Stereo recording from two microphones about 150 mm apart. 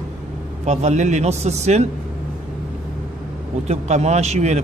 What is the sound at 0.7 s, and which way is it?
A man's voice, 50° right (ahead or behind).